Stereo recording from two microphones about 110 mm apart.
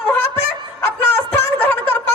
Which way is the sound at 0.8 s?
20° left (ahead or behind).